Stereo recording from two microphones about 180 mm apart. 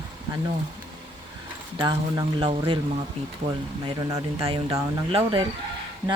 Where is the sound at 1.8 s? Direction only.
25° right (ahead or behind).